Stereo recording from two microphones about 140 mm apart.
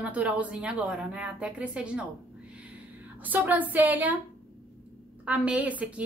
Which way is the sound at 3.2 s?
10° right (ahead or behind).